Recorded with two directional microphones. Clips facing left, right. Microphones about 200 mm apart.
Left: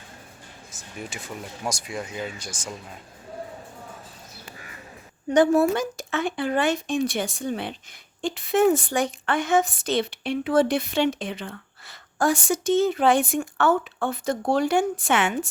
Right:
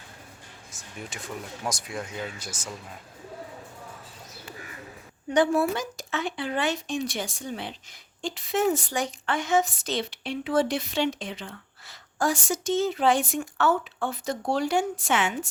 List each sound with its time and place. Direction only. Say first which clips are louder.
0.7 s speech: left 3 dB; centre (ahead or behind)
5.3 s a woman's voice: left 4 dB; 45° left (ahead or behind)